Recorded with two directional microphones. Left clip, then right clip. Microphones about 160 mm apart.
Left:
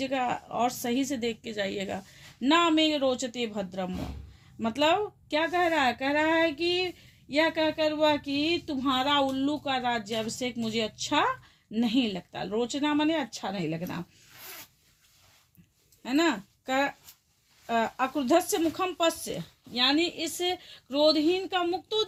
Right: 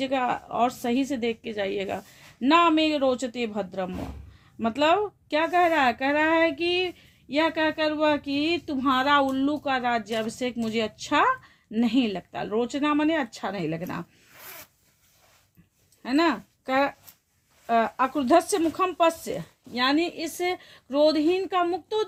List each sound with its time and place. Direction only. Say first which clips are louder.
0.0 s a woman's voice: right 3 dB; 30° right (ahead or behind)
16.0 s a woman's voice: right 3 dB; 35° right (ahead or behind)